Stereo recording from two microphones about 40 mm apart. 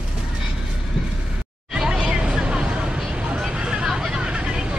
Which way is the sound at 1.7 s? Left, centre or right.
Centre.